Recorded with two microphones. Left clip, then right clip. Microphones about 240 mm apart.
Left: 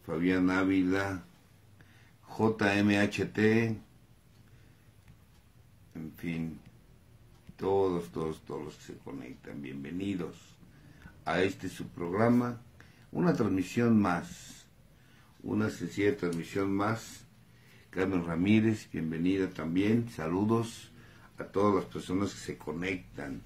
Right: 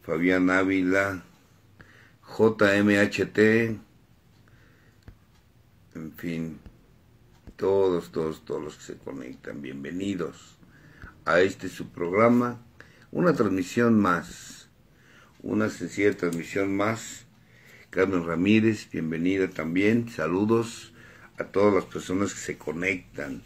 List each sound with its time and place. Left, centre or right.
0.1 s speech: centre
2.3 s speech: centre
7.8 s speech: centre
15.5 s speech: centre
17.8 s speech: centre